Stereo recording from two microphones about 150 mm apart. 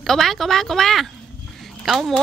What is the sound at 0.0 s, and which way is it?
A woman's voice, centre (ahead or behind).